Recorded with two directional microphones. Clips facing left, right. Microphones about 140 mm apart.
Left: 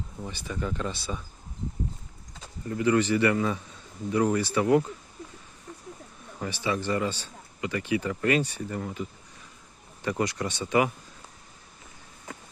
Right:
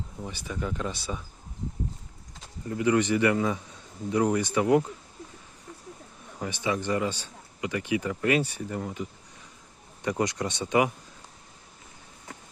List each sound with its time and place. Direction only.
0.2 s speech: 10° right (ahead or behind)
2.6 s speech: 15° right (ahead or behind)
6.4 s speech: 20° right (ahead or behind)